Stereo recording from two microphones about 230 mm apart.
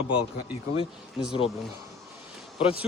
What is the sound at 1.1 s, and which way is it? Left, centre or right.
Speech, centre.